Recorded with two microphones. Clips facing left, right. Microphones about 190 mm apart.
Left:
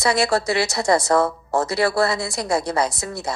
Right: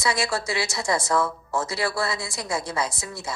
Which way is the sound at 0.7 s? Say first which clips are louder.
Left 7 dB; 65° left (ahead or behind).